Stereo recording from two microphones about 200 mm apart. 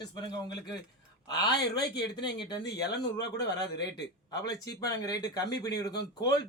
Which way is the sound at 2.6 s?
55° left (ahead or behind).